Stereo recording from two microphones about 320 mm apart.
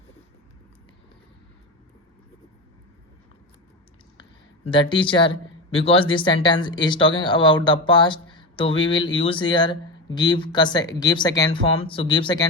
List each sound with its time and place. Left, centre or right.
4.6 s speech: centre